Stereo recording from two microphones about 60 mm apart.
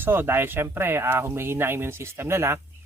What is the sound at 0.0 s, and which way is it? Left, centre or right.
Speech, right.